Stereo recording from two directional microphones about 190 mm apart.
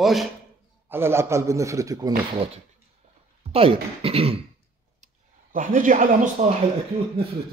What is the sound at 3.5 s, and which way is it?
Speech, 30° right (ahead or behind).